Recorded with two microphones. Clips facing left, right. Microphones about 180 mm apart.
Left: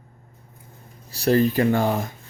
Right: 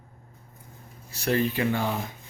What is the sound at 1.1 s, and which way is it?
Speech, 35° left (ahead or behind).